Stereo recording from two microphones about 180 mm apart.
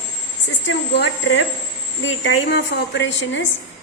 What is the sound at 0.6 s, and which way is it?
A woman's voice, 85° left.